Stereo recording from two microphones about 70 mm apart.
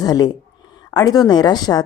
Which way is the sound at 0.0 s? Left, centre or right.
Left.